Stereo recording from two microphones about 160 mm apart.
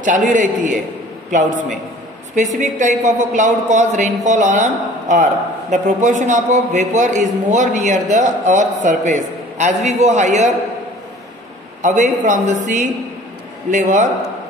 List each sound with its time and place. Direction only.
0.0 s a man's voice: 55° right (ahead or behind)
2.3 s a man's voice: 50° right (ahead or behind)
11.8 s a man's voice: 50° right (ahead or behind)